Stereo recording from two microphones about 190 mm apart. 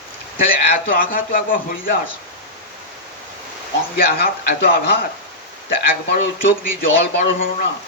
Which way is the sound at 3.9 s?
50° left (ahead or behind).